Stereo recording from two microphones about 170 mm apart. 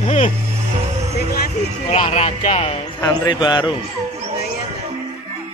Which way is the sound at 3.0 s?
25° left (ahead or behind).